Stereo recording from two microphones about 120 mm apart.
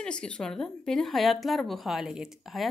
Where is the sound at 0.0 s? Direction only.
10° left (ahead or behind).